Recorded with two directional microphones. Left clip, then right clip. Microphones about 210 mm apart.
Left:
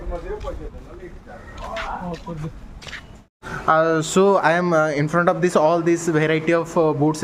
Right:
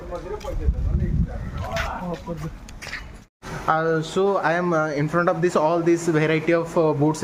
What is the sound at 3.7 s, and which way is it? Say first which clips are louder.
Speech: left 4 dB; 25° left (ahead or behind).